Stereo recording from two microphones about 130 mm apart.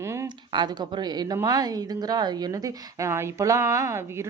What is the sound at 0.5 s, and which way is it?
Speech, 35° right (ahead or behind).